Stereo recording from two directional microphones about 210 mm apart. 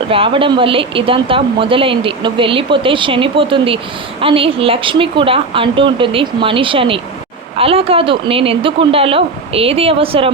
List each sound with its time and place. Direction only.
0.1 s speech: 25° right (ahead or behind)